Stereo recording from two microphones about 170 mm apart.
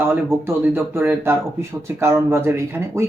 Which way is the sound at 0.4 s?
15° right (ahead or behind).